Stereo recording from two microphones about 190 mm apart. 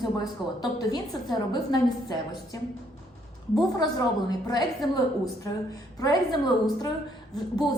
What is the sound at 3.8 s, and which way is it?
A woman's voice, 20° left (ahead or behind).